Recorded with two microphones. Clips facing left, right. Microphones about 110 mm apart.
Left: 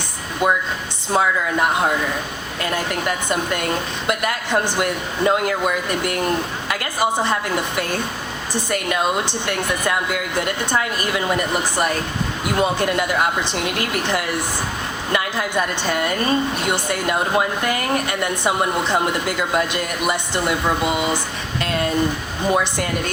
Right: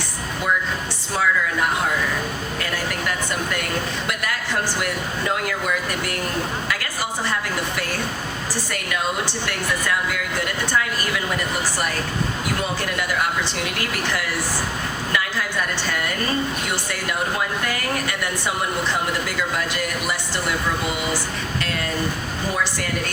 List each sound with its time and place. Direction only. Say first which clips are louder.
1.1 s a woman's voice: left 3 dB; 25° left (ahead or behind)
2.6 s a woman's voice: left 6 dB; 25° left (ahead or behind)
22.4 s a woman's voice: left 6 dB; 20° left (ahead or behind)